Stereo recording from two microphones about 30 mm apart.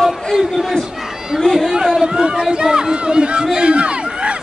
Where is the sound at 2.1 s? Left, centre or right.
Right.